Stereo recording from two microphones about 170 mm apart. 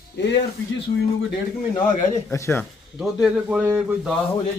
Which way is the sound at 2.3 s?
15° left (ahead or behind).